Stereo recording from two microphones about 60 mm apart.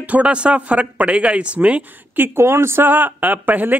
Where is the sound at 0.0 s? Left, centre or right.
Right.